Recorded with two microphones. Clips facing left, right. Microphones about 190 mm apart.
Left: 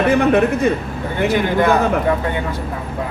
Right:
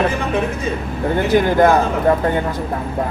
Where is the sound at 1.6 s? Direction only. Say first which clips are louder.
Right 2 dB; 45° right (ahead or behind).